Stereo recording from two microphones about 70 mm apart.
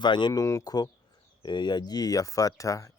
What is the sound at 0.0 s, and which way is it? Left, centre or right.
Speech, left.